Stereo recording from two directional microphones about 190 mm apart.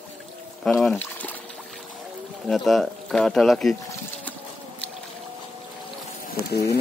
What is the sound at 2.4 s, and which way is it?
Speech, centre (ahead or behind).